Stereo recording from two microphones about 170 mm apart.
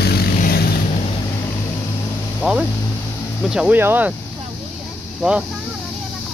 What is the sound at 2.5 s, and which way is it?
Speech, 5° right (ahead or behind).